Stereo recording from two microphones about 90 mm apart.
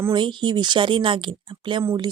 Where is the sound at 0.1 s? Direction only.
60° right (ahead or behind).